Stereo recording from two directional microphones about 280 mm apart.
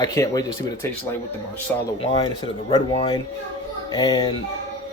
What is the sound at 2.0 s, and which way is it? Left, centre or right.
Speech, centre.